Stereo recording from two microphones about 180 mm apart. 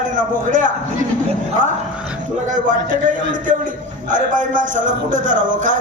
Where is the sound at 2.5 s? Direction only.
45° right (ahead or behind).